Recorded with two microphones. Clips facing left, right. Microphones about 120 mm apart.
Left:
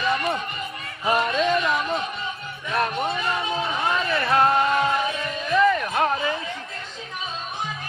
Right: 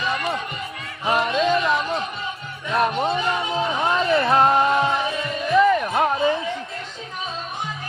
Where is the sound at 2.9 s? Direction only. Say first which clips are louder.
Right 3 dB; 30° right (ahead or behind).